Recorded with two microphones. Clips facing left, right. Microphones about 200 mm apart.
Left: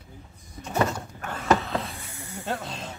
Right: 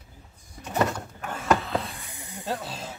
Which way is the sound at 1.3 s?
5° right (ahead or behind).